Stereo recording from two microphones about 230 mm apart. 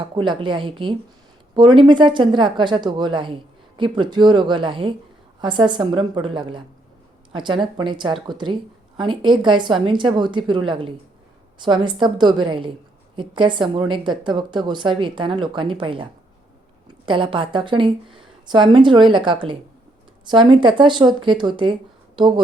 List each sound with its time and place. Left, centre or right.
0.2 s a woman's voice: right
17.1 s a woman's voice: right